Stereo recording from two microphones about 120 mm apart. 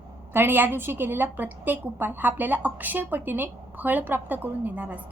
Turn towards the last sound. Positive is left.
turn(degrees=-15)  # may be behind; listen again after turning